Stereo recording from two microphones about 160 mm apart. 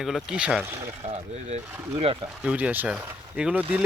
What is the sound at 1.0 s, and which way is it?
Speech, 45° right (ahead or behind).